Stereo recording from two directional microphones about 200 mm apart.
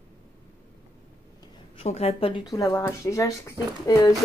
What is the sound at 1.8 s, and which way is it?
Speech, 30° left (ahead or behind).